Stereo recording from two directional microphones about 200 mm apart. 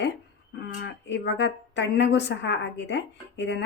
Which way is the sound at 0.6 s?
60° left (ahead or behind).